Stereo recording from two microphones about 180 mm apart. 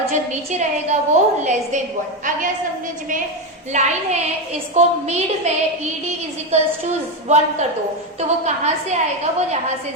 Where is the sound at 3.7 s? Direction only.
40° right (ahead or behind).